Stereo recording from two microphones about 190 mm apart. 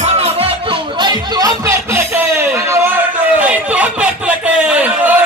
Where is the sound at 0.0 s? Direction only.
35° right (ahead or behind); by 4.1 s 5° right (ahead or behind).